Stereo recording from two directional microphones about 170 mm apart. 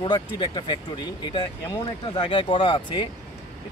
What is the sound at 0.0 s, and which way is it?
Speech, 25° left (ahead or behind).